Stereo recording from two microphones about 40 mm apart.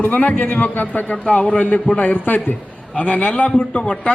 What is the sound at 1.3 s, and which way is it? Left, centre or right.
Speech, left.